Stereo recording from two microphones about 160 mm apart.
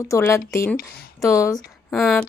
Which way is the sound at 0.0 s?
20° left (ahead or behind).